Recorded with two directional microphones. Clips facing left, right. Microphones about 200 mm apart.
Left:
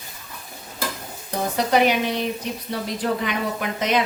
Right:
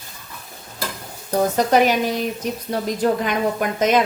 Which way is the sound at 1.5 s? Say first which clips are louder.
Right 1 dB; 45° right (ahead or behind).